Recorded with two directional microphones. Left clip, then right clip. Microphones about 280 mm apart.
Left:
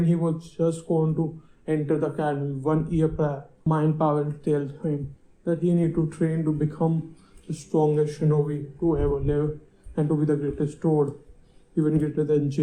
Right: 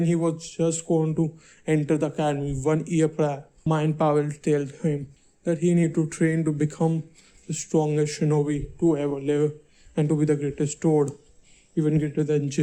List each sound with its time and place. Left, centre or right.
0.0 s speech: right